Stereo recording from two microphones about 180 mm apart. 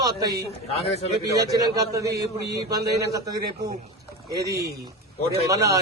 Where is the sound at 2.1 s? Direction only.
65° right (ahead or behind).